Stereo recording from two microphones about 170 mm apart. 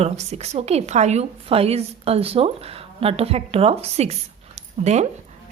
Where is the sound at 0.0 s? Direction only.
40° right (ahead or behind).